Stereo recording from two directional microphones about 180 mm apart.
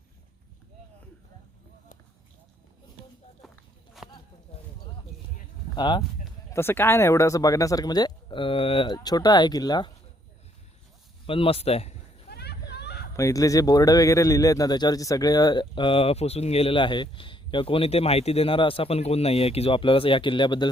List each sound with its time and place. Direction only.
4.0 s a sound: centre (ahead or behind)
5.7 s speech: 25° left (ahead or behind)
6.5 s speech: 15° left (ahead or behind)
11.3 s speech: 30° left (ahead or behind)
12.3 s a sound: 65° left (ahead or behind)
13.1 s speech: 15° left (ahead or behind)